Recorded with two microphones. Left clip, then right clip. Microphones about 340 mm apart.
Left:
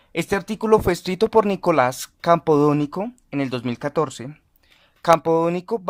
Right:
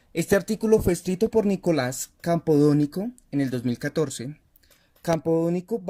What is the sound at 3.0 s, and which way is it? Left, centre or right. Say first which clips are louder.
Speech: left 3 dB; left.